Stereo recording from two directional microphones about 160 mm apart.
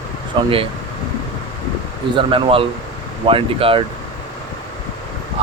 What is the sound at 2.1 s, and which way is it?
Speech, 35° right (ahead or behind).